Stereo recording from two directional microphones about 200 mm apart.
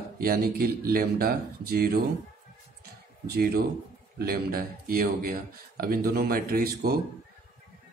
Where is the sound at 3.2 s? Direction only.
50° right (ahead or behind).